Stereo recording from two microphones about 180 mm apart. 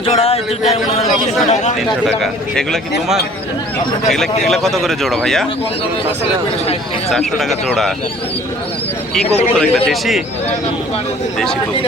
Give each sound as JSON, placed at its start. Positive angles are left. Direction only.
{"t": 0.0, "sound": "speech", "side_deg": 30}
{"t": 4.1, "sound": "a man's voice", "side_deg": 0}
{"t": 7.1, "sound": "a man's voice", "side_deg": 0}
{"t": 9.3, "sound": "a man's voice", "side_deg": 5}